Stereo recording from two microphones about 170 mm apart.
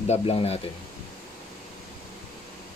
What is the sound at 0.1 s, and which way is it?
Speech, 35° left (ahead or behind).